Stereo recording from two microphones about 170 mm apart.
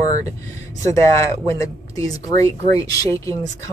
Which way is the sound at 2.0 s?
20° left (ahead or behind).